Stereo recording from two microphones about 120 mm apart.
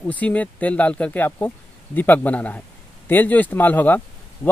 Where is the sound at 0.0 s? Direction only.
10° left (ahead or behind).